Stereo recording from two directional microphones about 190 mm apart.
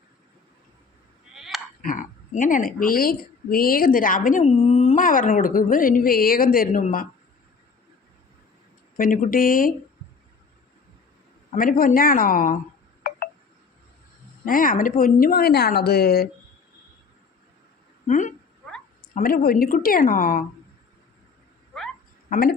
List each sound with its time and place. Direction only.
1.4 s sheep: centre (ahead or behind)
1.8 s a woman's voice: 45° left (ahead or behind)
9.0 s a woman's voice: 45° left (ahead or behind)
11.5 s a woman's voice: 50° left (ahead or behind)
13.0 s wind chime: 55° left (ahead or behind)
14.4 s a woman's voice: 45° left (ahead or behind)
18.1 s a woman's voice: 40° left (ahead or behind)
22.3 s speech: 50° left (ahead or behind)